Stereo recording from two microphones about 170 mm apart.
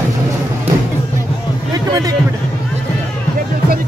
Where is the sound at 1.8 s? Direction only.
20° right (ahead or behind).